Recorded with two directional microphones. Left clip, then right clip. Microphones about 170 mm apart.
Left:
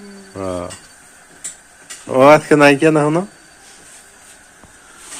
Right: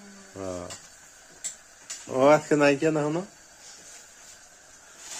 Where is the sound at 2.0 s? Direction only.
10° left (ahead or behind).